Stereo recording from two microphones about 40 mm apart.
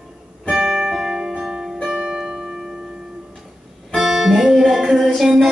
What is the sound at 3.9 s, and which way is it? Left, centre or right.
Music, centre.